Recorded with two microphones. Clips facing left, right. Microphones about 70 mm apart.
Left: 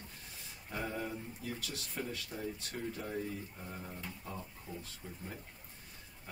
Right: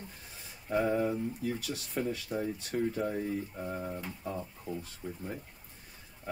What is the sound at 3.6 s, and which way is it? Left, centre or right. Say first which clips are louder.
Speech: right 9 dB; right.